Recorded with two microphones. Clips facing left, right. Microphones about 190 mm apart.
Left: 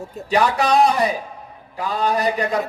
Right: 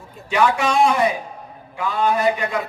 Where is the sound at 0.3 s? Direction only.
35° left (ahead or behind).